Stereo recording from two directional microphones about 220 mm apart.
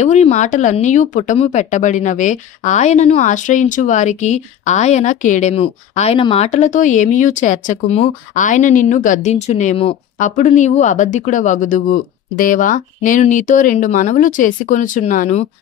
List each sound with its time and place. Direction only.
0.0 s speech: 30° left (ahead or behind)